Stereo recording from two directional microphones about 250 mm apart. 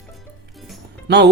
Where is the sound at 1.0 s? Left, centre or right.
Right.